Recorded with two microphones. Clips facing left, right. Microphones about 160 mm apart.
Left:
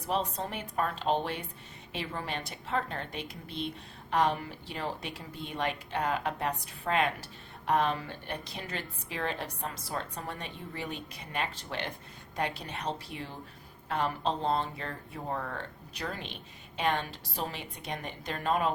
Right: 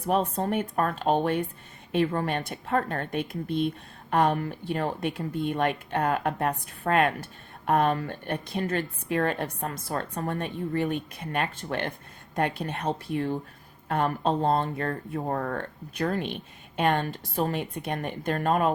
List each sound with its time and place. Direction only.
0.0 s speech: 50° right (ahead or behind)